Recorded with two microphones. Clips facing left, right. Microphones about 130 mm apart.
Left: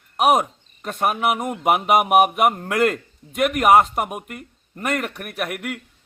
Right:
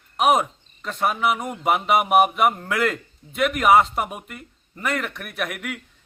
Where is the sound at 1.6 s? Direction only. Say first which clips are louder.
Left 2 dB; 55° left (ahead or behind).